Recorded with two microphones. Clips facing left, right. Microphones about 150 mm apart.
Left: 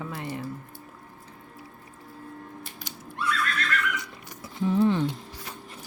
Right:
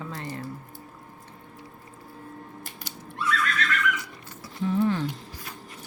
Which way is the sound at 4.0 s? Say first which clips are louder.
Even; 20° left (ahead or behind).